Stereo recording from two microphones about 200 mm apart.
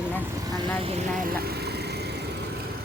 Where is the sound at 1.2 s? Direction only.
50° right (ahead or behind).